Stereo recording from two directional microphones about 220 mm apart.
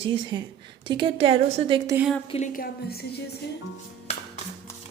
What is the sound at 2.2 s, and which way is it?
Speech, 30° left (ahead or behind).